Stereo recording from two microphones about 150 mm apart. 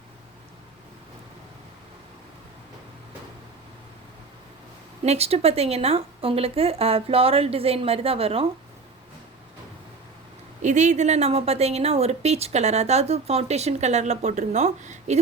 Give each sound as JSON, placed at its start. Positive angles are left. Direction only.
{"t": 5.0, "sound": "a woman's voice", "side_deg": -45}
{"t": 10.6, "sound": "a woman's voice", "side_deg": -55}